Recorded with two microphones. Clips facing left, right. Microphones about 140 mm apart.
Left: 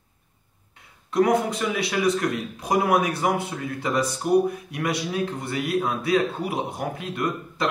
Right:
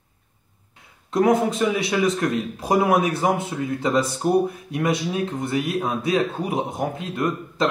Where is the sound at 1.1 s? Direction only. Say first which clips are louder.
Right 2 dB; 25° right (ahead or behind).